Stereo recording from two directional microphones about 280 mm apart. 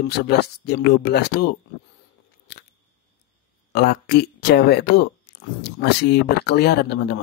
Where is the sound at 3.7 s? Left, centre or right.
Left.